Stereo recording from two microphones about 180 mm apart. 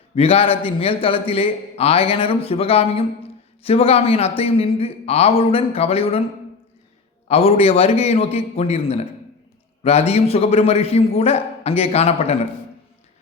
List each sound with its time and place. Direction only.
0.2 s a man's voice: 30° left (ahead or behind)
7.3 s a man's voice: 35° left (ahead or behind)